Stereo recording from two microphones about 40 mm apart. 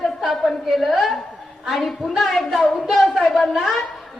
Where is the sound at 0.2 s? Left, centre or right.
Centre.